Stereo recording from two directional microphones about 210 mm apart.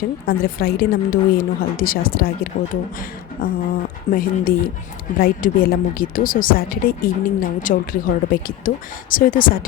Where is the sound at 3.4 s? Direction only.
45° left (ahead or behind).